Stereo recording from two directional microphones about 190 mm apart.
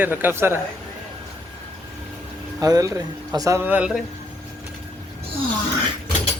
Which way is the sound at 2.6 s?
20° right (ahead or behind).